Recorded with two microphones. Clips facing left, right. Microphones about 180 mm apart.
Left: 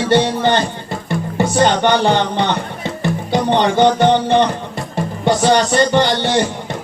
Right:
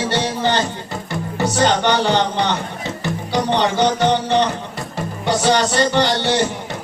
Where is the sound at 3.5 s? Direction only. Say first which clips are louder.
Left 5 dB; 55° left (ahead or behind).